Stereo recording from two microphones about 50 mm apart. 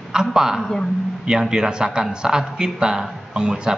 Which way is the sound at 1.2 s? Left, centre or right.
Centre.